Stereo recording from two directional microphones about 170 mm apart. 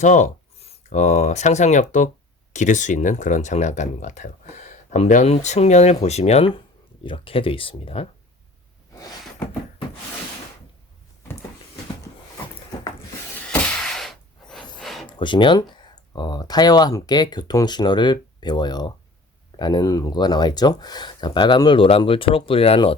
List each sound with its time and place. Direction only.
0.0 s speech: 45° left (ahead or behind)
13.5 s a sound: 5° left (ahead or behind)
15.0 s speech: 30° left (ahead or behind)